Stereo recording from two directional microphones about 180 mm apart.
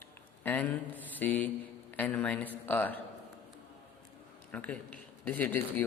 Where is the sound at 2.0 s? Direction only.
10° left (ahead or behind).